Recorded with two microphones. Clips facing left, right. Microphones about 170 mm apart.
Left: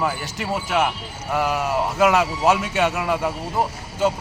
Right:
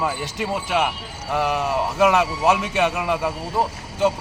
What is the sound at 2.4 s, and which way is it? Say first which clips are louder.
Speech: left 1 dB; 10° right (ahead or behind).